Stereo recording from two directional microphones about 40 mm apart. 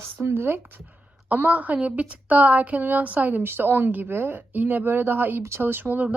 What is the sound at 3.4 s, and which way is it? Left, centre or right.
Speech, right.